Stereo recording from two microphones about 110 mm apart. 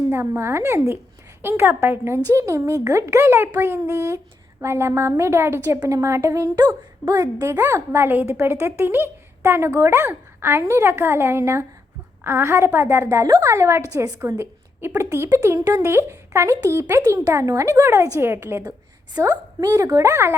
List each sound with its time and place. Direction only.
0.1 s a woman's voice: 20° right (ahead or behind)
19.2 s speech: 30° right (ahead or behind)